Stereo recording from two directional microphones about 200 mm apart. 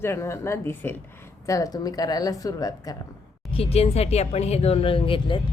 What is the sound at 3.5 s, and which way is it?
Speech, 30° left (ahead or behind).